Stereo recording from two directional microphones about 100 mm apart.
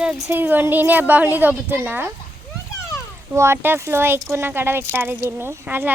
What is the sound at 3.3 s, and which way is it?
A woman's voice, 25° right (ahead or behind).